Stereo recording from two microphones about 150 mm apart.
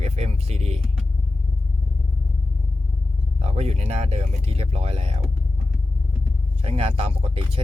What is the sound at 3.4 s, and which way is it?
Speech, 45° right (ahead or behind).